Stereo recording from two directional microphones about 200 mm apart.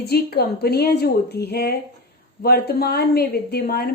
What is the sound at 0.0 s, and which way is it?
A woman's voice, 55° left (ahead or behind).